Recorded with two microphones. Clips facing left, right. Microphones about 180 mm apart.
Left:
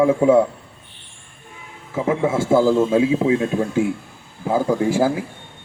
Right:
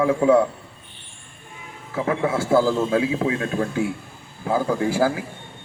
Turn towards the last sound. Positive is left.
turn(degrees=25)  # may be behind; listen again after turning